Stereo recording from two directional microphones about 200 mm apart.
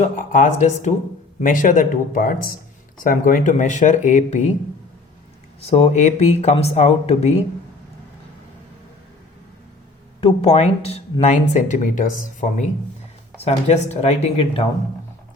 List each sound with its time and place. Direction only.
0.0 s speech: 40° left (ahead or behind)
5.5 s speech: 35° left (ahead or behind)
10.2 s speech: 30° left (ahead or behind)